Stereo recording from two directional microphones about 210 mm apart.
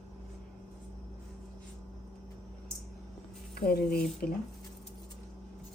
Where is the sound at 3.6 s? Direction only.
45° left (ahead or behind).